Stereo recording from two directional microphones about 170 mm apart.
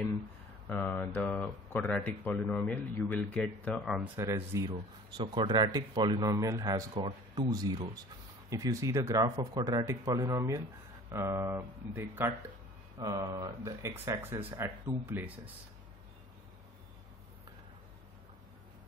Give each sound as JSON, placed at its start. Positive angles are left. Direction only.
{"t": 0.7, "sound": "speech", "side_deg": 10}
{"t": 4.1, "sound": "speech", "side_deg": -20}